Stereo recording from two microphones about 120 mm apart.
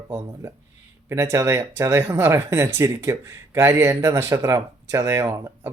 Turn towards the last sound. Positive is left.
turn(degrees=-20)  # may be behind; listen again after turning